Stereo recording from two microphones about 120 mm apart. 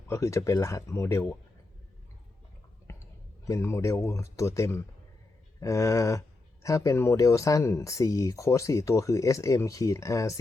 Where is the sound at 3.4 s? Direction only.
25° left (ahead or behind).